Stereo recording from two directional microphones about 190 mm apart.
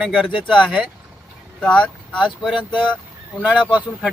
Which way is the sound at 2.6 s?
25° left (ahead or behind).